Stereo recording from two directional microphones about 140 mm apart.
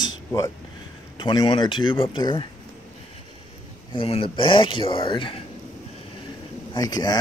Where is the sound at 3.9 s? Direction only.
40° left (ahead or behind).